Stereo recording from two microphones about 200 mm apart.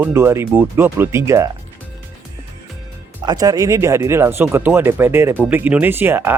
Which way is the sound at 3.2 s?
20° right (ahead or behind).